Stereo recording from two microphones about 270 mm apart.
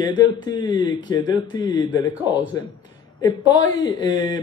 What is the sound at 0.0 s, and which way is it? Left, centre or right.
Speech, centre.